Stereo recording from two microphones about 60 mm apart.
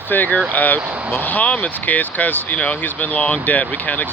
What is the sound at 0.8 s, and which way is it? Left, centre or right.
Speech, right.